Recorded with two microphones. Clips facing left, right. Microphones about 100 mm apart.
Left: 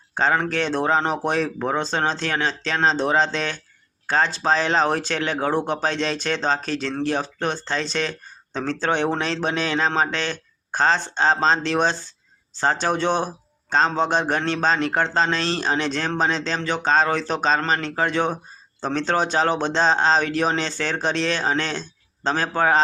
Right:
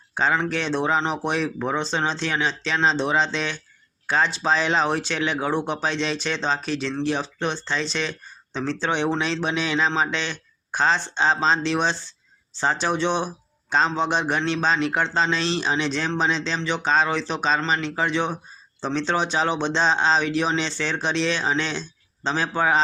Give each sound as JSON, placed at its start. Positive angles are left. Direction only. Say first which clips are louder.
{"t": 0.1, "sound": "a man's voice", "louder": "left 1 dB", "side_deg": 45}